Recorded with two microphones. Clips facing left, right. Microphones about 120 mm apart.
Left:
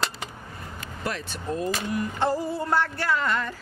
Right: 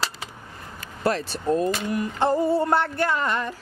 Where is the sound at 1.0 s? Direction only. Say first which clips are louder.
Right 8 dB; 35° right (ahead or behind).